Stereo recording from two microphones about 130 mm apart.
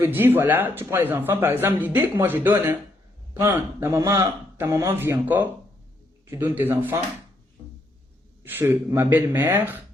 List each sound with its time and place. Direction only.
0.0 s a man's voice: 15° right (ahead or behind)
8.4 s speech: 15° right (ahead or behind)